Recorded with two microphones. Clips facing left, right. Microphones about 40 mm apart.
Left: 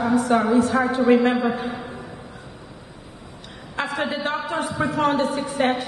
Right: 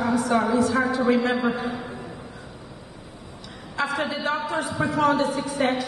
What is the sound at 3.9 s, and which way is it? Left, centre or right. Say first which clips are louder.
A man's voice: left 1 dB; left.